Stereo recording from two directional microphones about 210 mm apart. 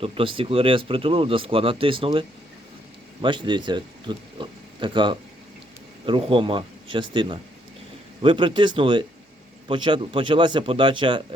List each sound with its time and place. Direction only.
0.0 s speech: 25° right (ahead or behind)